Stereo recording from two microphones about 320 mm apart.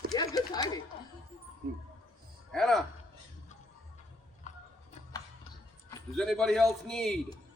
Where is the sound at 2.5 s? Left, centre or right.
Centre.